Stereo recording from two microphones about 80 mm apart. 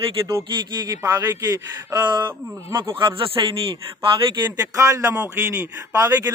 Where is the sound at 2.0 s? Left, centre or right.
Right.